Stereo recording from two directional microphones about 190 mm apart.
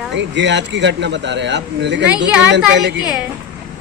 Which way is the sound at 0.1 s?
70° right (ahead or behind).